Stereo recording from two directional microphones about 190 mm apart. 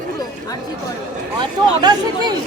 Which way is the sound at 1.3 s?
20° right (ahead or behind).